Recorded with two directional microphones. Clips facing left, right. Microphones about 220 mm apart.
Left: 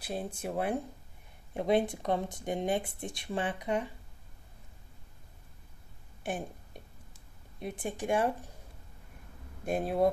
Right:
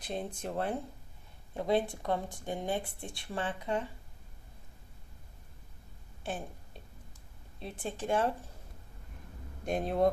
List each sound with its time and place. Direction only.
0.0 s speech: 5° left (ahead or behind)
6.2 s speech: 15° left (ahead or behind)
9.7 s speech: 5° left (ahead or behind)